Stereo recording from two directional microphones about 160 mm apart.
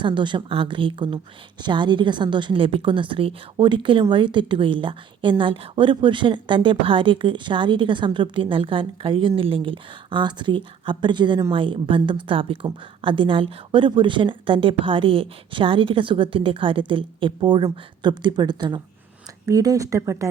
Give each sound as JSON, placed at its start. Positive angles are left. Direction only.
{"t": 0.0, "sound": "a woman's voice", "side_deg": -30}